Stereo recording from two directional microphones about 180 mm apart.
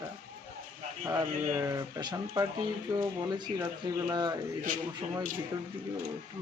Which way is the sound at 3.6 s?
15° right (ahead or behind).